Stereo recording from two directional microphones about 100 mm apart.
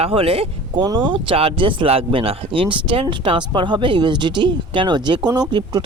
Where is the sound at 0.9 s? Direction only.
55° right (ahead or behind).